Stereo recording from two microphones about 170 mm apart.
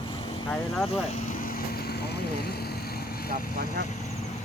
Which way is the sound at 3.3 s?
70° right (ahead or behind).